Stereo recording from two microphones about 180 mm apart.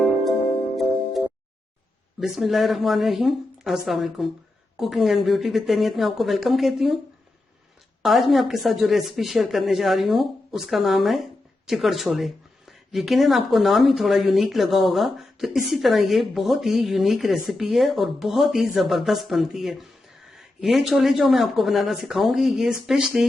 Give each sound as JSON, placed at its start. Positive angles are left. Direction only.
{"t": 2.2, "sound": "speech", "side_deg": 0}
{"t": 8.0, "sound": "speech", "side_deg": 0}